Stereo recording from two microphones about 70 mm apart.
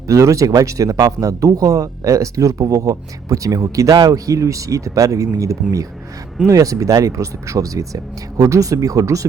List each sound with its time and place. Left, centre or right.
0.1 s speech: right
3.9 s speech: right
5.6 s speech: centre
6.5 s speech: right